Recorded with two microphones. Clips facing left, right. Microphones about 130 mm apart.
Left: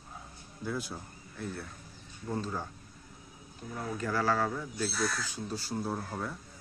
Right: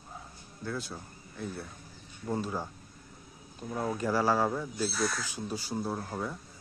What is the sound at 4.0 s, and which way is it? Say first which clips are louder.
Speech: right 2 dB; 15° right (ahead or behind).